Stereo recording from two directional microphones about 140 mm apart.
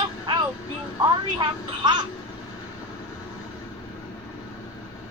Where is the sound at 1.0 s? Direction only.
30° right (ahead or behind).